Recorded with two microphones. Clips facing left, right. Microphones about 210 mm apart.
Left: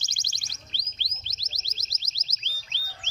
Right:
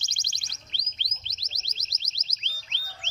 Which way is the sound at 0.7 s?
20° right (ahead or behind).